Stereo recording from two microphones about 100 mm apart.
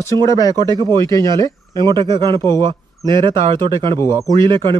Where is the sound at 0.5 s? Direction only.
45° right (ahead or behind).